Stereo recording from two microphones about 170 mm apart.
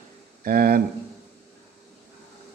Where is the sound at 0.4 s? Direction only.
60° right (ahead or behind).